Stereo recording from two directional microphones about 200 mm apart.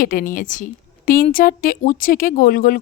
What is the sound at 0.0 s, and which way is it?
Speech, 45° left (ahead or behind).